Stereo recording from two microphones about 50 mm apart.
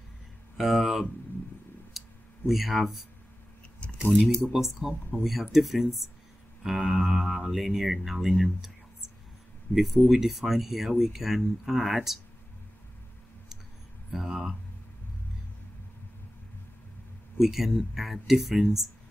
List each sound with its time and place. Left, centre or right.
0.6 s speech: centre
2.0 s a sound: centre
4.0 s speech: centre
9.7 s speech: left
10.0 s speech: centre
14.1 s speech: centre
17.4 s speech: centre